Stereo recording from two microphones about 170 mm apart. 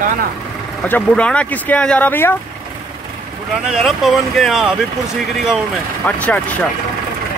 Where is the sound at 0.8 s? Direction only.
10° left (ahead or behind).